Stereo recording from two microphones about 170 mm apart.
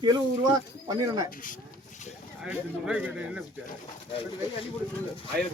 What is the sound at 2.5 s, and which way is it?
Speech, 10° right (ahead or behind).